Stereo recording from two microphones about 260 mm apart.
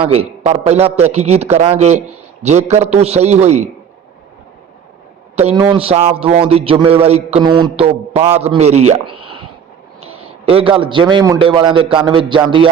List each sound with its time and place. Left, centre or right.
0.0 s a man's voice: right
5.4 s a man's voice: right
8.9 s a sound: centre
10.2 s a man's voice: right